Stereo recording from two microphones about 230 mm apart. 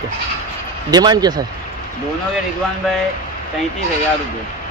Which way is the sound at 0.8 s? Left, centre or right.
Centre.